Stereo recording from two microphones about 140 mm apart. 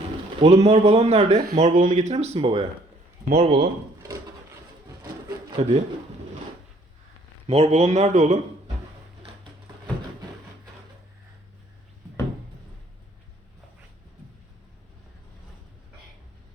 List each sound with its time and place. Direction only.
0.3 s a man's voice: 50° right (ahead or behind)
1.5 s a man's voice: 60° right (ahead or behind)
5.5 s a man's voice: 50° right (ahead or behind)
7.4 s a man's voice: 45° right (ahead or behind)